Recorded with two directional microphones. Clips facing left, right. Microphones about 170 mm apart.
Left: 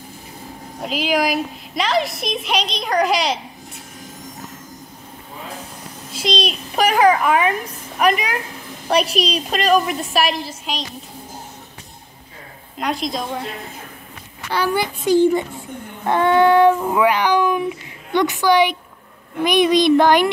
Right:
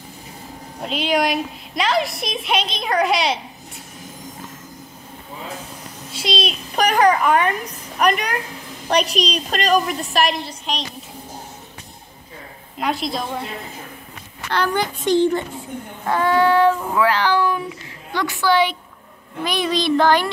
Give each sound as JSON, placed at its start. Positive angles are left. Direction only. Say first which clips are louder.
{"t": 0.8, "sound": "a woman's voice", "louder": "even", "side_deg": 0}
{"t": 6.1, "sound": "a woman's voice", "louder": "left 2 dB", "side_deg": 0}
{"t": 12.7, "sound": "a woman's voice", "louder": "even", "side_deg": 0}
{"t": 14.5, "sound": "speech", "louder": "left 1 dB", "side_deg": 10}
{"t": 16.1, "sound": "speech", "louder": "left 3 dB", "side_deg": 20}